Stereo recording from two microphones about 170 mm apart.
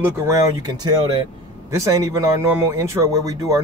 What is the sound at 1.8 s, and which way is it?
A man's voice, 20° right (ahead or behind).